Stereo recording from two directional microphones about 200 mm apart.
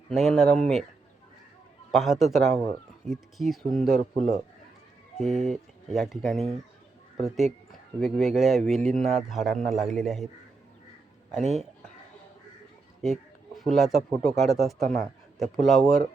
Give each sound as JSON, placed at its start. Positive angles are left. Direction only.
{"t": 0.1, "sound": "a man's voice", "side_deg": 0}
{"t": 1.9, "sound": "a man's voice", "side_deg": 0}
{"t": 11.3, "sound": "a man's voice", "side_deg": 0}
{"t": 13.0, "sound": "a man's voice", "side_deg": 0}